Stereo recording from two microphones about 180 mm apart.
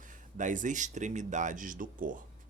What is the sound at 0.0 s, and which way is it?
Speech, 45° right (ahead or behind).